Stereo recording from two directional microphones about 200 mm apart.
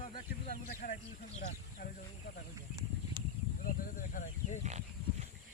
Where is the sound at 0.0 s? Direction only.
30° left (ahead or behind).